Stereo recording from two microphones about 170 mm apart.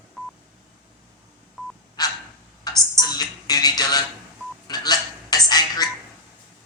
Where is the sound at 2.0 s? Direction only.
25° left (ahead or behind).